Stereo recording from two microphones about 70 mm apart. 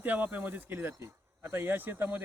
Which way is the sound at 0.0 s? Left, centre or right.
Right.